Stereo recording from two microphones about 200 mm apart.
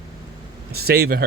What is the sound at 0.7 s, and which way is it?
Speech, 50° right (ahead or behind).